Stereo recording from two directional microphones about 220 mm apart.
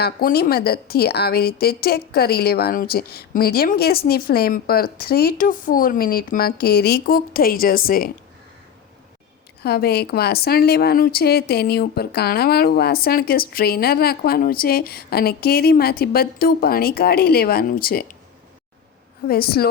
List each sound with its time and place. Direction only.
0.0 s a woman's voice: 45° left (ahead or behind)
9.6 s a woman's voice: 45° left (ahead or behind)
19.3 s a woman's voice: 45° left (ahead or behind)